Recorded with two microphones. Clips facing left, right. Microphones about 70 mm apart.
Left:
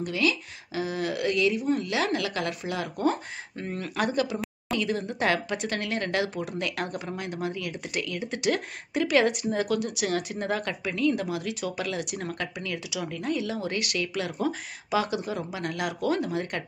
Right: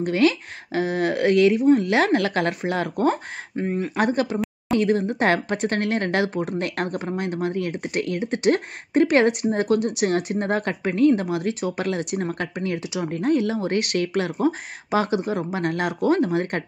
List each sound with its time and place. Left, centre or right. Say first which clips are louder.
0.0 s speech: right 7 dB; right
3.5 s speech: right 9 dB; right
3.9 s speech: right 3 dB; right